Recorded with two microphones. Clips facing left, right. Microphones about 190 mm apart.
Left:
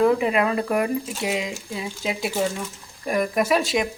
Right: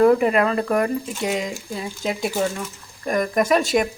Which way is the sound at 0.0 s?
Centre (ahead or behind).